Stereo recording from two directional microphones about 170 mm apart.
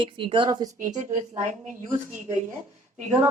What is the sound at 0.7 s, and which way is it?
Speech, 50° right (ahead or behind).